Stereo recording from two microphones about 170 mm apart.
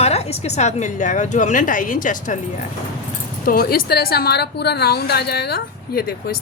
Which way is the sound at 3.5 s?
60° left (ahead or behind).